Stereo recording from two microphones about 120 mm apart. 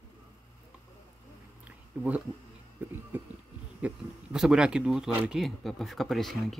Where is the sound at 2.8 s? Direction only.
15° right (ahead or behind).